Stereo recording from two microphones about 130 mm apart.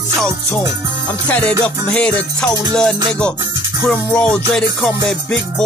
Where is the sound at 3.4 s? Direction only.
30° right (ahead or behind).